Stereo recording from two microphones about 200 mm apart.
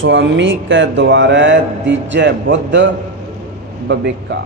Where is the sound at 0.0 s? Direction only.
65° right (ahead or behind).